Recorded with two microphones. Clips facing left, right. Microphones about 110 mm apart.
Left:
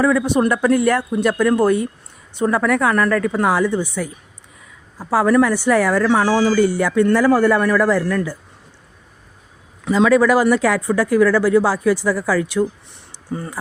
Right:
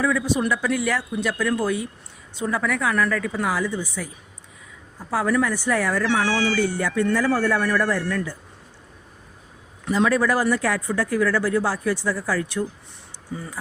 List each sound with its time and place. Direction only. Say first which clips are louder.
0.0 s a woman's voice: left 6 dB; 60° left (ahead or behind)
6.6 s a man's voice: left 7 dB; 85° left
9.8 s speech: left 6 dB; 90° left
13.3 s speech: left 6 dB; 65° left (ahead or behind)